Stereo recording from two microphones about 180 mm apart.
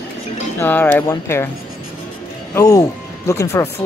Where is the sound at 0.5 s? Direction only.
10° left (ahead or behind).